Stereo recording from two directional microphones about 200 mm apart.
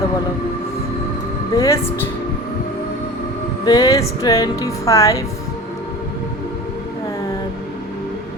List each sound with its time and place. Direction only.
1.5 s music: 15° left (ahead or behind)
3.7 s music: 15° left (ahead or behind)